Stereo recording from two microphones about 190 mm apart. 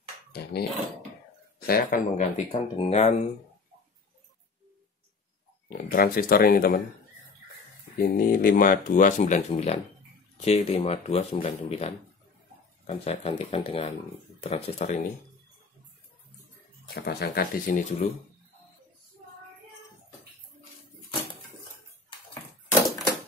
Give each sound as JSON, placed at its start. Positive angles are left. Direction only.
{"t": 0.3, "sound": "speech", "side_deg": 60}
{"t": 1.7, "sound": "speech", "side_deg": 50}
{"t": 5.7, "sound": "speech", "side_deg": 50}
{"t": 8.0, "sound": "speech", "side_deg": 50}
{"t": 16.9, "sound": "speech", "side_deg": 55}